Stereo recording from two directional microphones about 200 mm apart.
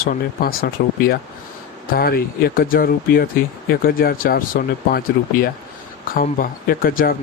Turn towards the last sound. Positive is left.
turn(degrees=45)  # may be behind; listen again after turning